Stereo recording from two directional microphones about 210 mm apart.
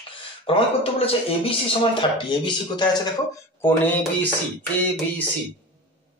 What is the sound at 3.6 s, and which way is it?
Speech, 10° left (ahead or behind).